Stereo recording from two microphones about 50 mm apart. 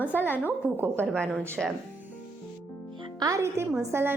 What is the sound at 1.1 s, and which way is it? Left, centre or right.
Speech, centre.